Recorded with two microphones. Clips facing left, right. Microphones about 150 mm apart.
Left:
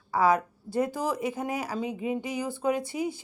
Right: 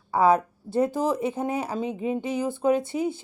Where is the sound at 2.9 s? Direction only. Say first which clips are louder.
Right 4 dB; 15° left (ahead or behind).